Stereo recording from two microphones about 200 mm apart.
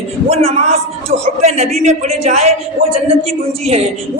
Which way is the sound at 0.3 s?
30° right (ahead or behind).